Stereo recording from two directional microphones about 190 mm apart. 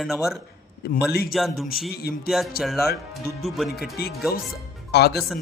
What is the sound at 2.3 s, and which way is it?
A man's voice, centre (ahead or behind).